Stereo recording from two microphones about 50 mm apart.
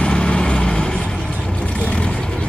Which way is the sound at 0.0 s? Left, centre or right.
Centre.